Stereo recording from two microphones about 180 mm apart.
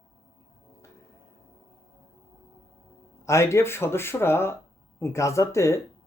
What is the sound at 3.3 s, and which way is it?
Speech, 15° left (ahead or behind).